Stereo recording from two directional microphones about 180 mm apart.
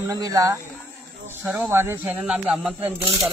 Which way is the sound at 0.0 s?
20° right (ahead or behind).